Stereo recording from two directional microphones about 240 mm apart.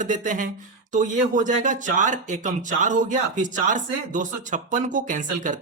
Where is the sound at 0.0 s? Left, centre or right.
Right.